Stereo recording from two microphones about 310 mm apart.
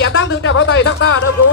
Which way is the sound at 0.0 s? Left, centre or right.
Left.